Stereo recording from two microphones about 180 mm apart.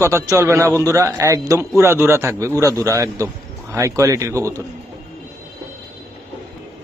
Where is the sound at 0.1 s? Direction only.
15° right (ahead or behind).